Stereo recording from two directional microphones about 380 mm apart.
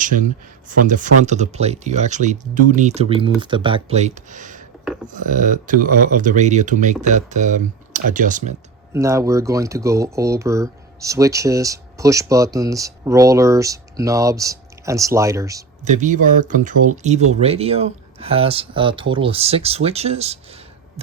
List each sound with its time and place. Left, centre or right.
0.0 s speech: centre
8.9 s speech: centre